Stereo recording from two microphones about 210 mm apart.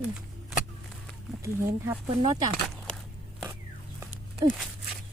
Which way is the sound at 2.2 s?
20° right (ahead or behind).